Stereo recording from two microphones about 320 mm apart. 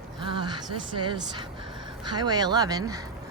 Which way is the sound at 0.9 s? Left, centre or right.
Centre.